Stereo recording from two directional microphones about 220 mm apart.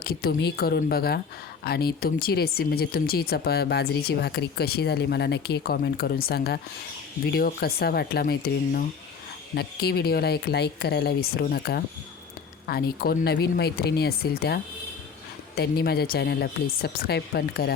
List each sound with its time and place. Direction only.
0.0 s speech: 45° left (ahead or behind)